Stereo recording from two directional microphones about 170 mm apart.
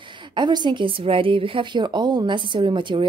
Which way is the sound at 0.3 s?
25° right (ahead or behind).